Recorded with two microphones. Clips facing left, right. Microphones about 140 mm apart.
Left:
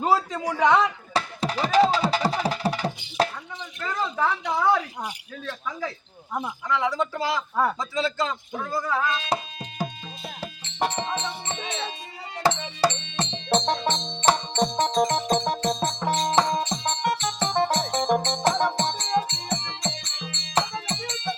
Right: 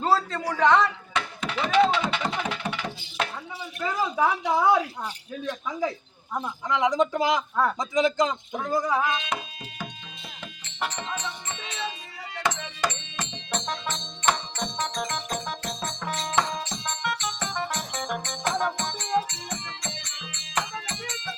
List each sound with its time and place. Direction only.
0.0 s a man's voice: 10° left (ahead or behind)
1.1 s a sound: 35° left (ahead or behind)
3.8 s a man's voice: 10° right (ahead or behind)
7.5 s a man's voice: 10° left (ahead or behind)
7.8 s a man's voice: 15° right (ahead or behind)
9.3 s music: 35° left (ahead or behind)